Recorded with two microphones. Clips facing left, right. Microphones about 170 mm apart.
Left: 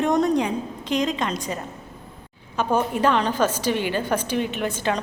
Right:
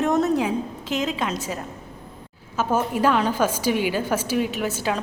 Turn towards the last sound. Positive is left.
turn(degrees=-5)  # may be behind; listen again after turning